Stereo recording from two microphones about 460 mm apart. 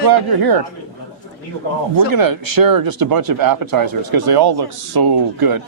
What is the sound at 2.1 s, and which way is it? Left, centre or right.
Speech, right.